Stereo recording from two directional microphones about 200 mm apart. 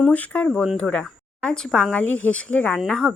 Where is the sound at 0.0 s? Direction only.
5° left (ahead or behind).